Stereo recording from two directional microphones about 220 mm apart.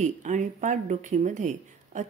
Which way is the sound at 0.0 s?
35° right (ahead or behind).